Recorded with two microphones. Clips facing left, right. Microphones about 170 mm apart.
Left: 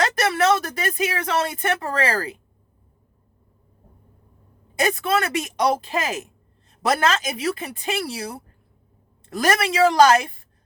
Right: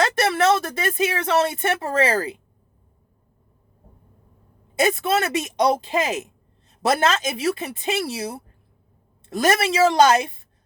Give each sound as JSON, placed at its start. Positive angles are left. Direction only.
{"t": 0.0, "sound": "speech", "side_deg": -25}
{"t": 4.8, "sound": "speech", "side_deg": -25}
{"t": 9.3, "sound": "speech", "side_deg": -25}